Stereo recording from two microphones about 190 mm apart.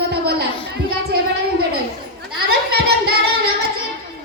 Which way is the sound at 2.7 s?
55° right (ahead or behind).